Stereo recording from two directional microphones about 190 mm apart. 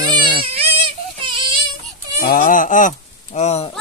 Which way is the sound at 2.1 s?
50° left (ahead or behind).